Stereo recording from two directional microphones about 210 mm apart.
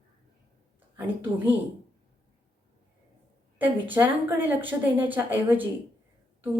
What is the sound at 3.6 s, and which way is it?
A woman's voice, 10° right (ahead or behind).